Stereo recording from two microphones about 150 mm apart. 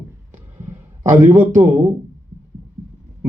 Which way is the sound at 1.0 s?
55° right (ahead or behind).